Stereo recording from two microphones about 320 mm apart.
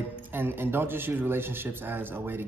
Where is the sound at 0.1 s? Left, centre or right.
Centre.